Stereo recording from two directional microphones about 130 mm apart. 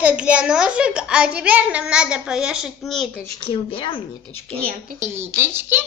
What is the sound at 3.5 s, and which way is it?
Speech, 45° left (ahead or behind).